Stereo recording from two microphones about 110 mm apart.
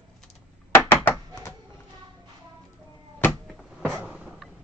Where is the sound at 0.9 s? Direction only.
15° left (ahead or behind).